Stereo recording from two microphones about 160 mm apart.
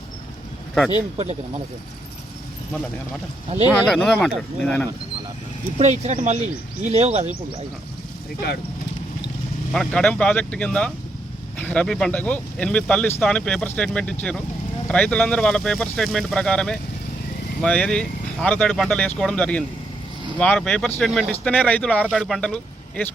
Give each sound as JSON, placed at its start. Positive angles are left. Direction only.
{"t": 1.2, "sound": "speech", "side_deg": -45}
{"t": 3.7, "sound": "speech", "side_deg": 5}
{"t": 5.8, "sound": "speech", "side_deg": -45}
{"t": 9.7, "sound": "speech", "side_deg": 5}